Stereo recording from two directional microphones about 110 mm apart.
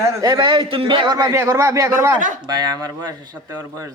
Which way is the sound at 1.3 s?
25° right (ahead or behind).